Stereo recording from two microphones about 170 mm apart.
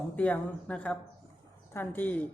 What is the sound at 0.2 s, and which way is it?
A woman's voice, 5° left (ahead or behind).